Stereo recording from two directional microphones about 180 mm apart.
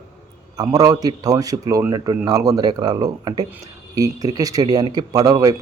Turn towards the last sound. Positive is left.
turn(degrees=-20)  # may be behind; listen again after turning